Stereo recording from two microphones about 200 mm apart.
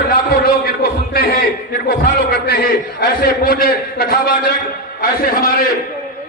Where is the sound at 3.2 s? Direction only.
50° left (ahead or behind).